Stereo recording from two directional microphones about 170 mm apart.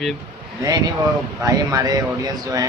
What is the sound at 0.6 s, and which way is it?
Speech, 25° right (ahead or behind).